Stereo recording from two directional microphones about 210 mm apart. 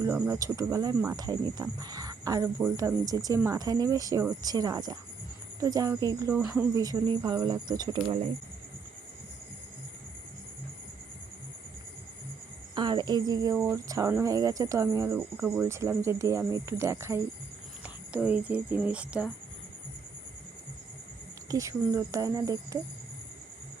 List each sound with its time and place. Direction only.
0.0 s speech: 15° right (ahead or behind)
6.4 s speech: 5° right (ahead or behind)
6.7 s speech: 20° right (ahead or behind)
12.7 s speech: 20° right (ahead or behind); by 19.3 s 5° right (ahead or behind)
21.5 s speech: 15° right (ahead or behind)